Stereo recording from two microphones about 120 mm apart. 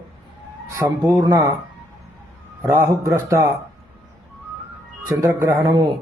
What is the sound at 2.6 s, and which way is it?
Speech, 25° right (ahead or behind).